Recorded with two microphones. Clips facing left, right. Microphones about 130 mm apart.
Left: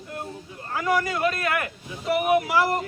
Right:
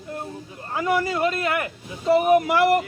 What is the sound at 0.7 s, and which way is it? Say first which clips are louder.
Speech: right 2 dB; 25° right (ahead or behind).